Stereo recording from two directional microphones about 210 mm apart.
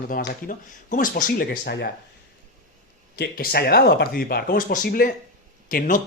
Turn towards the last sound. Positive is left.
turn(degrees=40)  # may be behind; listen again after turning